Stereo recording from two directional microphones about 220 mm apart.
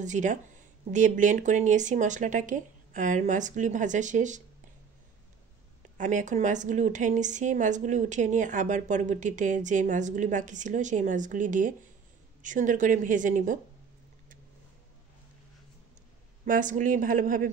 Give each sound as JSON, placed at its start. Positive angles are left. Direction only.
{"t": 0.0, "sound": "a woman's voice", "side_deg": -35}
{"t": 5.8, "sound": "a woman's voice", "side_deg": -35}
{"t": 16.4, "sound": "a woman's voice", "side_deg": -35}